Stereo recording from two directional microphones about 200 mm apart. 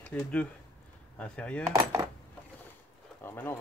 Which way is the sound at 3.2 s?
10° left (ahead or behind).